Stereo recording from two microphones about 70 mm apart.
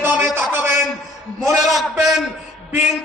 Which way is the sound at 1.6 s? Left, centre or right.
Centre.